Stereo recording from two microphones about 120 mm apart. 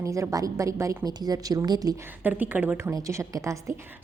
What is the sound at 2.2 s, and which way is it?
A woman's voice, 15° right (ahead or behind).